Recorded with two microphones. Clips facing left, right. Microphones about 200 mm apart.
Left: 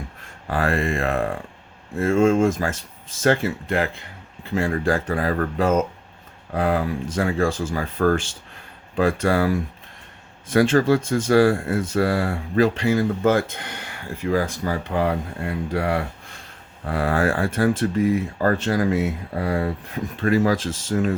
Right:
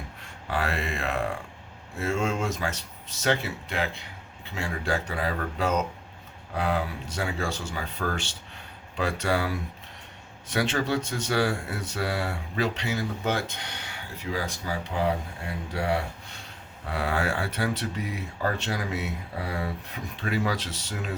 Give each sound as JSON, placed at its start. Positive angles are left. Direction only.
{"t": 0.5, "sound": "speech", "side_deg": 50}